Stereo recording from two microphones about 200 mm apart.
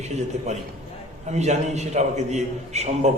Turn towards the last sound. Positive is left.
turn(degrees=-35)  # may be behind; listen again after turning